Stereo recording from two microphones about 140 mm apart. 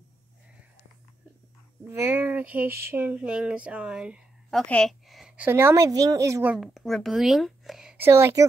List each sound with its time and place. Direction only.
1.9 s a sound: 15° right (ahead or behind)
6.5 s speech: centre (ahead or behind)
8.0 s speech: 20° right (ahead or behind)